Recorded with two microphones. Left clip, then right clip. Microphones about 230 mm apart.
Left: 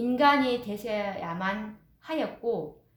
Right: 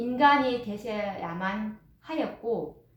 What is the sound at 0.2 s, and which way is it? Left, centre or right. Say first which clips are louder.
A woman's voice: right 2 dB; left.